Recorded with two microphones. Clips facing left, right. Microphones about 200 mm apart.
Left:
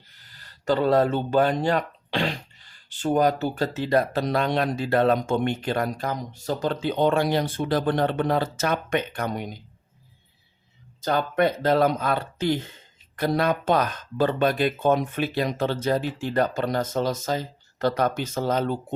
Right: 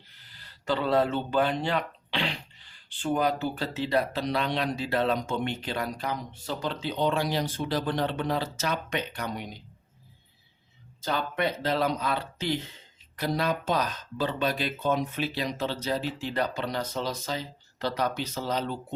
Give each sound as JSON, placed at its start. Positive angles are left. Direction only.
{"t": 0.2, "sound": "speech", "side_deg": 45}
{"t": 11.0, "sound": "speech", "side_deg": 50}